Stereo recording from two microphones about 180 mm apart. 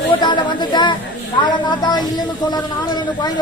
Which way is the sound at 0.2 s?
25° left (ahead or behind).